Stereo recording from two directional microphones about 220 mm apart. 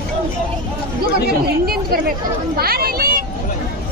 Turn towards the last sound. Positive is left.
turn(degrees=-40)  # may be behind; listen again after turning